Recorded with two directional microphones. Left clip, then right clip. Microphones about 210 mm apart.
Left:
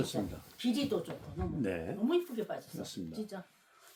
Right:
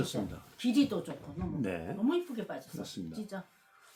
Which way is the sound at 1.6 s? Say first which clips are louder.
Right 2 dB; 10° right (ahead or behind).